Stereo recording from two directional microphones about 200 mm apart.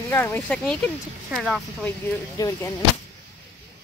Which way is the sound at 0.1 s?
10° left (ahead or behind).